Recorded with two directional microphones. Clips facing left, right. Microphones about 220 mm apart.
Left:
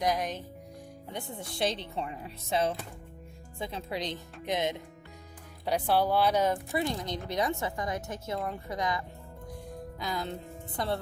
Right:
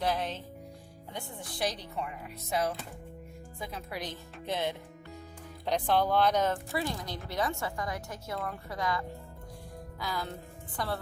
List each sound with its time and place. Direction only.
0.0 s speech: 15° left (ahead or behind)
1.1 s a woman's voice: 25° left (ahead or behind)